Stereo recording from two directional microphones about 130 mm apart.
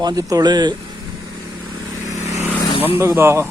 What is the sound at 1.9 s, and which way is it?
Vehicle, 25° right (ahead or behind).